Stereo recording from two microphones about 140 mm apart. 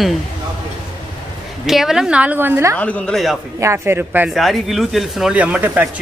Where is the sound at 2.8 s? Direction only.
5° left (ahead or behind).